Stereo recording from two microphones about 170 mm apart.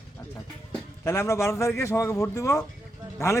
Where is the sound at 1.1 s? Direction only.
15° left (ahead or behind).